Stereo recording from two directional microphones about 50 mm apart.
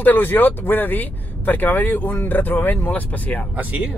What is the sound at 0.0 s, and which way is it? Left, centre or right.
Speech, left.